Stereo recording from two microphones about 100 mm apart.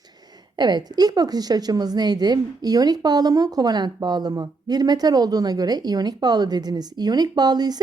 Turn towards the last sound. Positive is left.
turn(degrees=-40)  # may be behind; listen again after turning